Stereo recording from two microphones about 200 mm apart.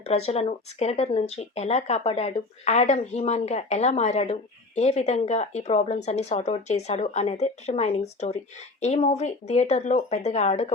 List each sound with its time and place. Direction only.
0.0 s speech: 30° left (ahead or behind)